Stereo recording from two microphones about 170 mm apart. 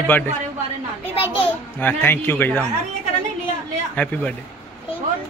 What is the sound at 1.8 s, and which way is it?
Speech, 10° left (ahead or behind).